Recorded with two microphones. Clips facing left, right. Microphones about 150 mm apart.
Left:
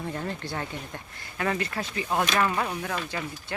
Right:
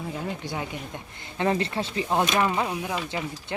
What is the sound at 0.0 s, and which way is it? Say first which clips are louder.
Speech: right 1 dB; 5° right (ahead or behind).